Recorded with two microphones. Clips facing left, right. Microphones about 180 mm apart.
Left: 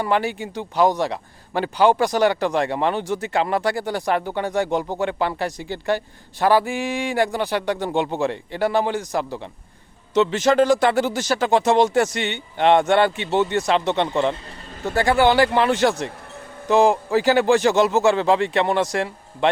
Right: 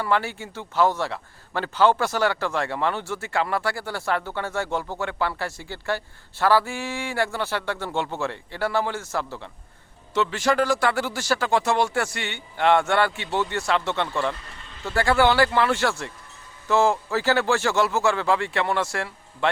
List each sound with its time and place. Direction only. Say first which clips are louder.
0.0 s a man's voice: left 3 dB; 15° left (ahead or behind)